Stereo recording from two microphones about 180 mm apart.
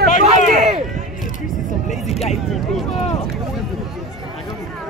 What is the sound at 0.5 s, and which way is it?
Speech, 45° right (ahead or behind).